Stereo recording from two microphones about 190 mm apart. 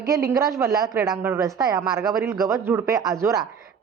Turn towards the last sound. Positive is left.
turn(degrees=-15)  # may be behind; listen again after turning